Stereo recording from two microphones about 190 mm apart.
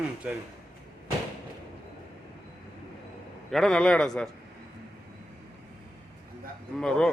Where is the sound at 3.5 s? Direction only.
Centre (ahead or behind).